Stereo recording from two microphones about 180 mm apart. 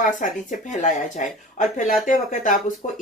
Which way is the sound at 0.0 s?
45° left (ahead or behind).